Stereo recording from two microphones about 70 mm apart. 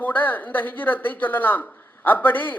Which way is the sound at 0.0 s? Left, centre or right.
Left.